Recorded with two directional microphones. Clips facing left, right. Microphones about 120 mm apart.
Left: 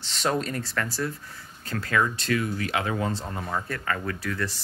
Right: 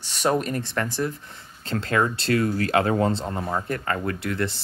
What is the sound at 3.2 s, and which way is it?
Speech, 25° right (ahead or behind).